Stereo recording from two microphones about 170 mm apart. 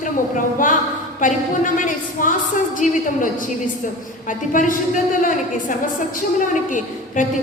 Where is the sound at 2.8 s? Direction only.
50° left (ahead or behind).